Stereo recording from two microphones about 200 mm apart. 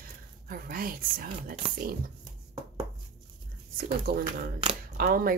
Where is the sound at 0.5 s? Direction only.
45° right (ahead or behind).